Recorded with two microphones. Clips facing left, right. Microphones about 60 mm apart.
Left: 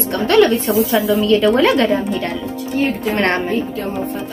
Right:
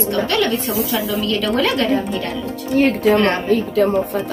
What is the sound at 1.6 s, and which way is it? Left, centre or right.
Speech, left.